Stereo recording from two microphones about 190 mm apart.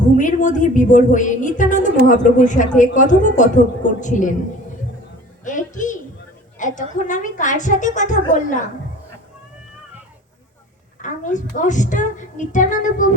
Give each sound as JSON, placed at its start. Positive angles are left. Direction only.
{"t": 0.0, "sound": "speech", "side_deg": 40}
{"t": 5.5, "sound": "a sound", "side_deg": 40}
{"t": 7.1, "sound": "speech", "side_deg": 40}
{"t": 11.0, "sound": "speech", "side_deg": 40}